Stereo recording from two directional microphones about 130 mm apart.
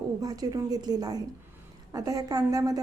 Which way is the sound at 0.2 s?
30° right (ahead or behind).